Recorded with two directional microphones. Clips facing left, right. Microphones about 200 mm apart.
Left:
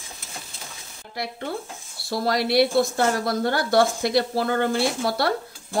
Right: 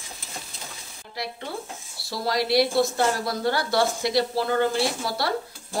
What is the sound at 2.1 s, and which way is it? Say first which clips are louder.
A woman's voice: left 2 dB; 55° left (ahead or behind).